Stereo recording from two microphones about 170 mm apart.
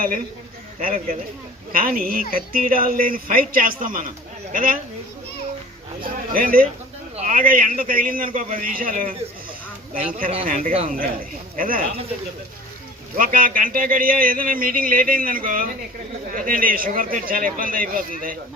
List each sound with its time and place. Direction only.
0.8 s speech: 55° right (ahead or behind)
6.0 s speech: 55° right (ahead or behind)
13.1 s speech: 55° right (ahead or behind)